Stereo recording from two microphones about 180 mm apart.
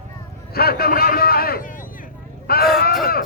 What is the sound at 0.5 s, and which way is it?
A man's voice, 60° left (ahead or behind).